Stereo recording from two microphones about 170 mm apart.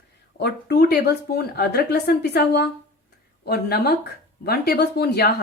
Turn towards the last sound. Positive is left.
turn(degrees=70)  # may be behind; listen again after turning